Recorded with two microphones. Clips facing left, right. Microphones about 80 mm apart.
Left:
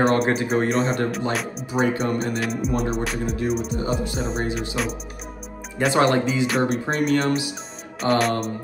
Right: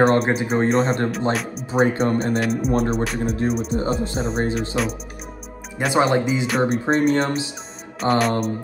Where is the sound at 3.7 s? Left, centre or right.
Right.